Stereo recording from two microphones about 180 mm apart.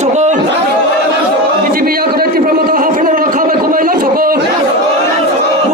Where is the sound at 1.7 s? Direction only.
55° right (ahead or behind).